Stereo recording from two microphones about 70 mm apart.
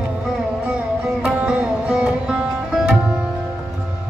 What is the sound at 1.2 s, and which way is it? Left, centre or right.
Music, centre.